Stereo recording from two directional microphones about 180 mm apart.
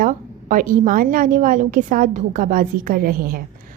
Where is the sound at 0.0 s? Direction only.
45° right (ahead or behind).